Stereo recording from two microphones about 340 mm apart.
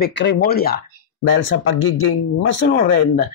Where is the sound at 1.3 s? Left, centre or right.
Left.